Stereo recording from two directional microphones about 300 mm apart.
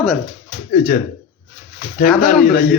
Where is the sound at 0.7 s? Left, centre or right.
Left.